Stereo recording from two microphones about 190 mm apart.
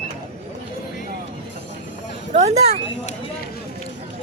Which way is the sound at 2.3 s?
35° right (ahead or behind).